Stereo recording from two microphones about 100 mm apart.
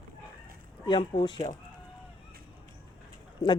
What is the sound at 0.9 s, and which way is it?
Speech, 55° left (ahead or behind).